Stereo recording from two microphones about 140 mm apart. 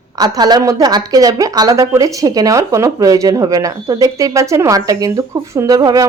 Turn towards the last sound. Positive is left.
turn(degrees=-25)  # may be behind; listen again after turning